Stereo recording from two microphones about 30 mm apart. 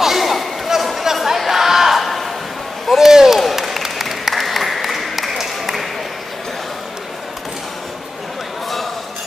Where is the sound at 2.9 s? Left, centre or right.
Centre.